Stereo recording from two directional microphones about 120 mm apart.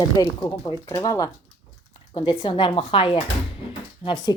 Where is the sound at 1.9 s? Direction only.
45° left (ahead or behind).